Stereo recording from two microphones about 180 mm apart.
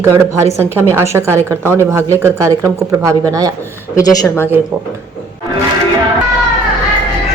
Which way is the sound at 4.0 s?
20° left (ahead or behind).